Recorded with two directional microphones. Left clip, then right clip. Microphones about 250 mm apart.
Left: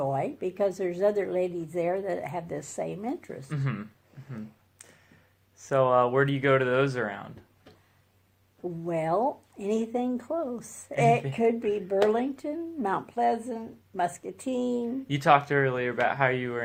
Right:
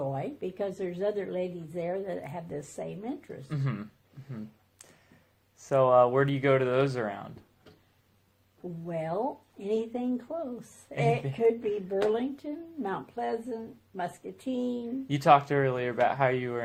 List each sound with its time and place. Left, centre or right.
0.1 s speech: left
3.5 s speech: centre
5.6 s speech: centre
8.8 s speech: left
15.0 s speech: centre